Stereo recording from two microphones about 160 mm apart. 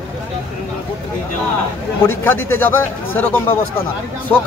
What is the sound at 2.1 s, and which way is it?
Speech, 15° left (ahead or behind).